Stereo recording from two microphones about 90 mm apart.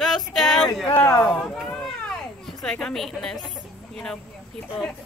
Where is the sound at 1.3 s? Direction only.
5° left (ahead or behind).